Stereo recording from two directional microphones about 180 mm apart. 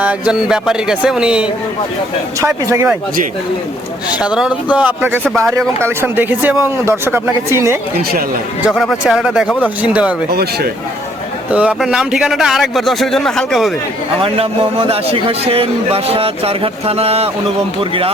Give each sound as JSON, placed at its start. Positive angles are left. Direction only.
{"t": 0.0, "sound": "a man's voice", "side_deg": -5}
{"t": 2.4, "sound": "speech", "side_deg": -15}
{"t": 4.2, "sound": "speech", "side_deg": -5}
{"t": 8.6, "sound": "a man's voice", "side_deg": 0}
{"t": 11.5, "sound": "a man's voice", "side_deg": -5}
{"t": 14.2, "sound": "a man's voice", "side_deg": -30}